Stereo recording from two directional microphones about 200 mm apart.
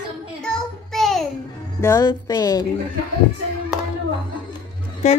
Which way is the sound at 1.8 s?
20° left (ahead or behind).